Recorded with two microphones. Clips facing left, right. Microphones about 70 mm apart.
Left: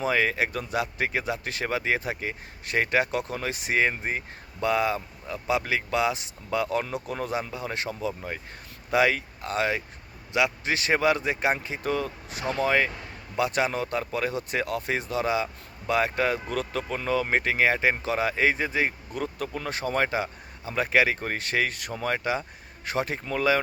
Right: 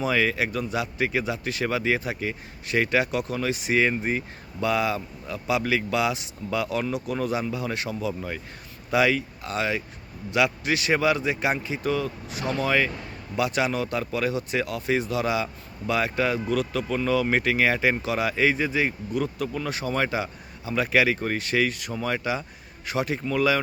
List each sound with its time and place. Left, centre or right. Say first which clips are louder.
0.0 s speech: right 1 dB; left
10.3 s a man's voice: right 2 dB; left
10.8 s speech: even; left